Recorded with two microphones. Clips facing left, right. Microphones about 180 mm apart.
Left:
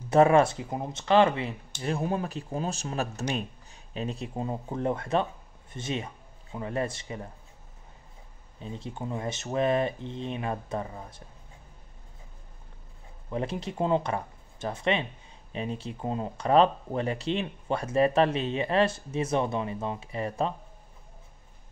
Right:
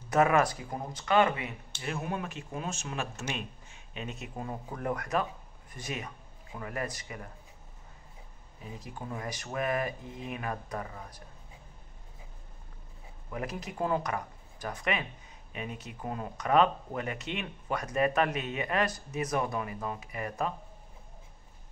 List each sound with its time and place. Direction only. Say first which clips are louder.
0.1 s speech: left 5 dB; 30° left (ahead or behind)
8.5 s speech: left 5 dB; 25° left (ahead or behind)
13.3 s speech: left 5 dB; 30° left (ahead or behind)